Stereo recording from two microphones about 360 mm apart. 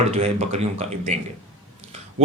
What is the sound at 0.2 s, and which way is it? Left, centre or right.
A man's voice, centre.